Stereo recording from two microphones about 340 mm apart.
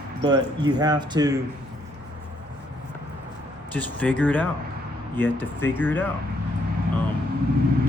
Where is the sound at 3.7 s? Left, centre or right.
Centre.